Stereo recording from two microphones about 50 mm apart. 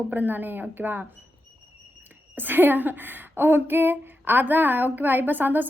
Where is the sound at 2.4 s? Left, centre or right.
Right.